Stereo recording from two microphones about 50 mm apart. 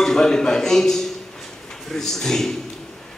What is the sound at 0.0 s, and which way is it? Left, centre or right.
A man's voice, centre.